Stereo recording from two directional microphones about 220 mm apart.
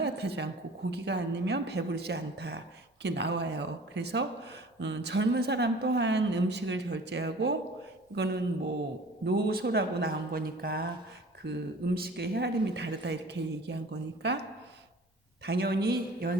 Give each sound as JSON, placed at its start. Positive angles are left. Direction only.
{"t": 0.0, "sound": "a woman's voice", "side_deg": -50}
{"t": 15.4, "sound": "a woman's voice", "side_deg": -45}